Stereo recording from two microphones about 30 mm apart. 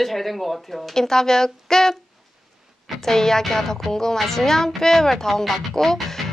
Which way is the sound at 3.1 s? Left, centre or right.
Centre.